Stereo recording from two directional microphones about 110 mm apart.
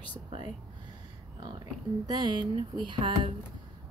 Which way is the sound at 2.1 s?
45° right (ahead or behind).